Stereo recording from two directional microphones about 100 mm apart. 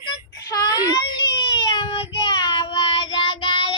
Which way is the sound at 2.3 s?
45° left (ahead or behind).